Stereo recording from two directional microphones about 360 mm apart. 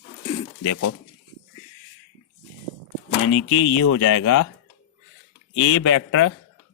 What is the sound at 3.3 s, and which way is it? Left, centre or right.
Speech, left.